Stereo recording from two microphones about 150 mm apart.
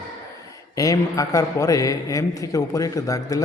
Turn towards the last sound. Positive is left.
turn(degrees=20)  # may be behind; listen again after turning